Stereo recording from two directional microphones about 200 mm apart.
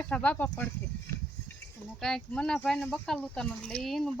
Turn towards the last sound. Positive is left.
turn(degrees=0)  # may be behind; listen again after turning